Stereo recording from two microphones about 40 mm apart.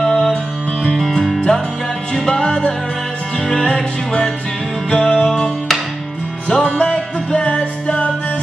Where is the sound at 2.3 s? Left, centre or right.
Centre.